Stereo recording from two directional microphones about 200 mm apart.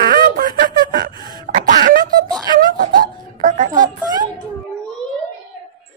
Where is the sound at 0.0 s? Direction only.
45° right (ahead or behind).